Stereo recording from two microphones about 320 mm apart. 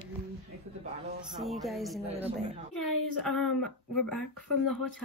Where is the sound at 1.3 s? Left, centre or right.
Centre.